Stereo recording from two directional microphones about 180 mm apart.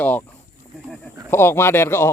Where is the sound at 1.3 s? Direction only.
15° left (ahead or behind).